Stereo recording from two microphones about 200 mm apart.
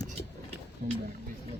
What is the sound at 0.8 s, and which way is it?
Speech, 45° right (ahead or behind).